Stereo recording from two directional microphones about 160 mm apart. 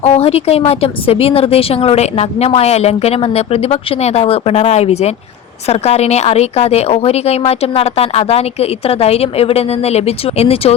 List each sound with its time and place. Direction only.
0.0 s speech: 40° left (ahead or behind)